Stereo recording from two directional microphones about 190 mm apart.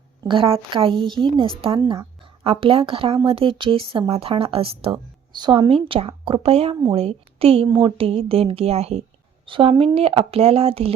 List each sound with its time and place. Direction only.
0.2 s a woman's voice: 25° right (ahead or behind)